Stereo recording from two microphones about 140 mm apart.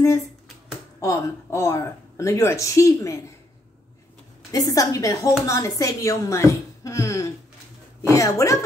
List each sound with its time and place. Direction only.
1.0 s speech: 20° left (ahead or behind)
4.5 s speech: 25° left (ahead or behind)